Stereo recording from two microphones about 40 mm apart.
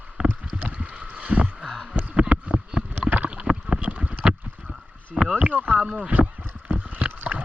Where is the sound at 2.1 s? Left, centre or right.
Right.